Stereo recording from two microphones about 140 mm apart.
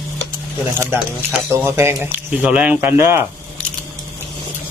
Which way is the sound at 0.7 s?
15° right (ahead or behind).